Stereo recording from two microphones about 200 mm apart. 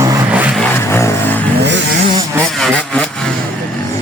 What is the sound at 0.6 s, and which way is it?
Vehicle, 10° left (ahead or behind).